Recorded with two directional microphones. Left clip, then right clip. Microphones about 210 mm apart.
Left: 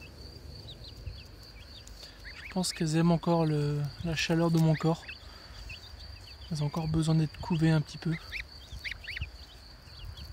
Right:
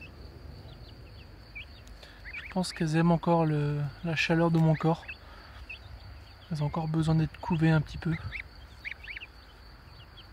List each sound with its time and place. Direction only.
2.3 s speech: centre (ahead or behind)
6.5 s speech: centre (ahead or behind)